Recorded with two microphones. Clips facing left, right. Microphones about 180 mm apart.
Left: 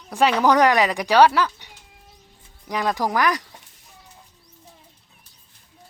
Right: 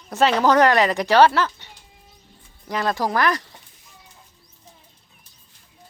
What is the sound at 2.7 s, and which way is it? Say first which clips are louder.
Speech: even; 15° left (ahead or behind).